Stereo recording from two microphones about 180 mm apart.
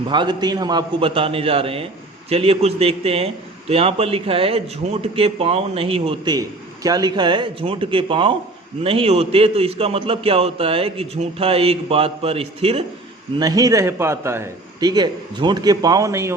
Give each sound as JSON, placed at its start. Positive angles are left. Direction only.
{"t": 0.1, "sound": "a man's voice", "side_deg": -25}
{"t": 13.4, "sound": "a man's voice", "side_deg": -20}